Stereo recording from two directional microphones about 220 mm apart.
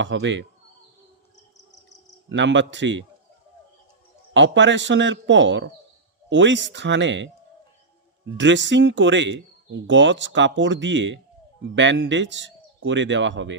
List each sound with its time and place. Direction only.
0.0 s speech: 55° right (ahead or behind)
2.3 s speech: 55° right (ahead or behind)
4.4 s speech: 55° right (ahead or behind)
8.4 s speech: 55° right (ahead or behind)